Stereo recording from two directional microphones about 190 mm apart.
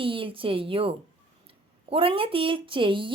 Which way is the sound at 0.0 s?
25° right (ahead or behind).